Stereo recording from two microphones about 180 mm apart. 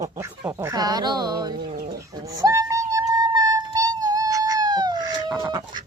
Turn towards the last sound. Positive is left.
turn(degrees=-25)  # may be behind; listen again after turning